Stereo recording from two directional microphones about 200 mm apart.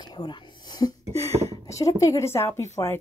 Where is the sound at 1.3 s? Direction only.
30° right (ahead or behind).